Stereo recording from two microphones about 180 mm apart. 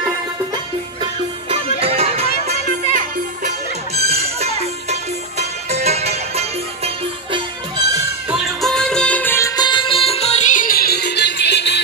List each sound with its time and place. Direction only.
1.5 s music: 35° right (ahead or behind)
3.4 s music: 35° right (ahead or behind)
8.3 s music: centre (ahead or behind)
9.6 s music: 25° left (ahead or behind); by 11.8 s 70° left (ahead or behind)